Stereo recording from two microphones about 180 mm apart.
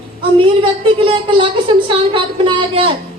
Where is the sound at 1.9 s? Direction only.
30° right (ahead or behind).